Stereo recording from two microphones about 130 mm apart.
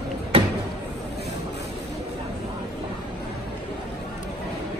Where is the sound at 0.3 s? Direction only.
45° right (ahead or behind).